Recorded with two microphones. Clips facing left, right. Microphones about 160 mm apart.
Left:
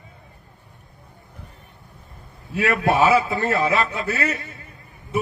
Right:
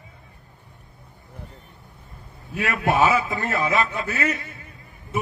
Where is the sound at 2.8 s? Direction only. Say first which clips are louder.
Left 1 dB; 40° left (ahead or behind).